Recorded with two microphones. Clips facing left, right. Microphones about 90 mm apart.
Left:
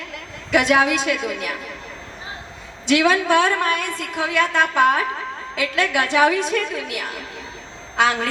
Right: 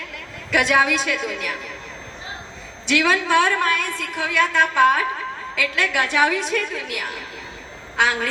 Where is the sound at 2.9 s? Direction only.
25° left (ahead or behind).